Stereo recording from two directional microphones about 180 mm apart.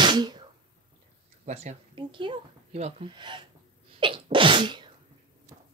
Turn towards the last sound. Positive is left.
turn(degrees=-25)  # may be behind; listen again after turning